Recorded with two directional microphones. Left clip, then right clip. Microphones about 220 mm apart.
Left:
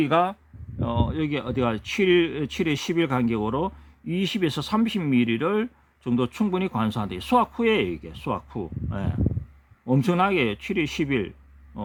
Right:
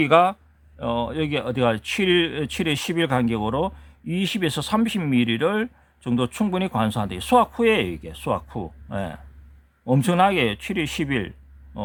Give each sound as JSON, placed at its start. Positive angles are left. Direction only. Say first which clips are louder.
{"t": 0.0, "sound": "speech", "louder": "right 5 dB", "side_deg": -15}